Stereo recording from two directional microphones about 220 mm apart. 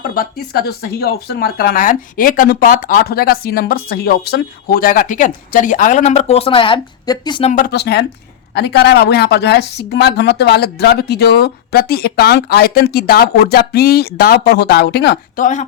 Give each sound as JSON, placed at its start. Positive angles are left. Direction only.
{"t": 0.0, "sound": "speech", "side_deg": 40}
{"t": 7.5, "sound": "a woman's voice", "side_deg": 45}